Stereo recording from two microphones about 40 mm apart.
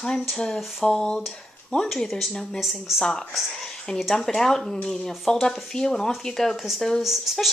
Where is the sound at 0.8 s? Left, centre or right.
Centre.